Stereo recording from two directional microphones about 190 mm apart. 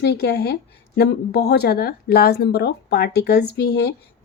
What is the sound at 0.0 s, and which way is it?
A woman's voice, 60° left (ahead or behind).